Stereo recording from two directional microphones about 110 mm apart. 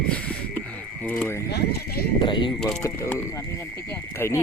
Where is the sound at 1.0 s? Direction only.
20° left (ahead or behind).